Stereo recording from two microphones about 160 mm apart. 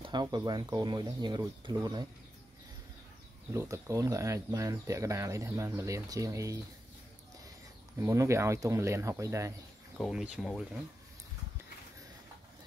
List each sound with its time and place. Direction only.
0.0 s speech: 25° right (ahead or behind)
3.5 s speech: 20° right (ahead or behind)
8.0 s speech: 20° right (ahead or behind)
9.9 s speech: centre (ahead or behind)